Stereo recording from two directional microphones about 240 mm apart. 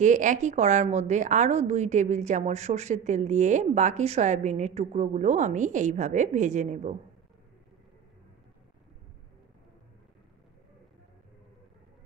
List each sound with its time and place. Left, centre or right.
0.0 s a woman's voice: right